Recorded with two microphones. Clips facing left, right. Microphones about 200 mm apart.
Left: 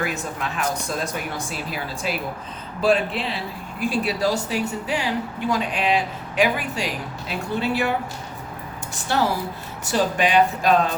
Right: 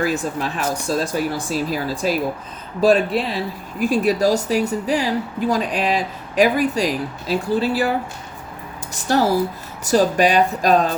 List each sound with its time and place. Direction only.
0.0 s speech: 35° right (ahead or behind)
9.0 s speech: 40° right (ahead or behind)